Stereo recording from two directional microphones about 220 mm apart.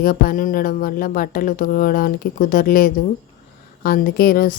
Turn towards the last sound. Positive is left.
turn(degrees=40)  # may be behind; listen again after turning